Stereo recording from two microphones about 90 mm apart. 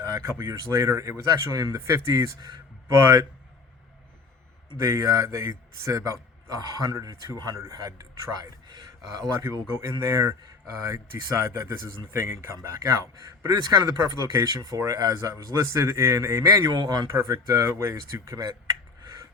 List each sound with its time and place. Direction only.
0.0 s a man's voice: 40° right (ahead or behind)
1.7 s a man's voice: 30° right (ahead or behind)
4.8 s a man's voice: 40° right (ahead or behind)
9.4 s a man's voice: 30° right (ahead or behind)
13.4 s a man's voice: 45° right (ahead or behind); by 16.4 s 30° right (ahead or behind)
16.4 s a man's voice: 40° right (ahead or behind)
16.7 s a man's voice: 50° right (ahead or behind)
17.1 s speech: 30° right (ahead or behind)